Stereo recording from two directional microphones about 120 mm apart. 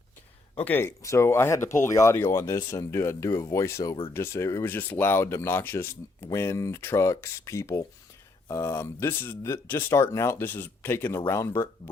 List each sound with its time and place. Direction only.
0.5 s speech: 15° left (ahead or behind)